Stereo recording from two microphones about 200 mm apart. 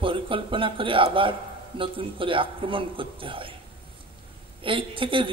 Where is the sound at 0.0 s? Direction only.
25° right (ahead or behind).